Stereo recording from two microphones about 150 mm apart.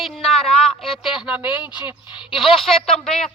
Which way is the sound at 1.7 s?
30° left (ahead or behind).